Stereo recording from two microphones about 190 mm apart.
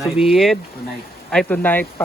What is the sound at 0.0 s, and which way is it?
Speech, centre (ahead or behind).